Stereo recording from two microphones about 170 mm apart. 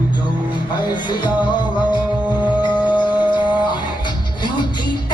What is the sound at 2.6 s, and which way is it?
Music, 25° left (ahead or behind).